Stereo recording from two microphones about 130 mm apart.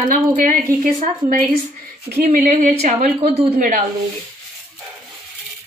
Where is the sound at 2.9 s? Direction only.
60° right (ahead or behind).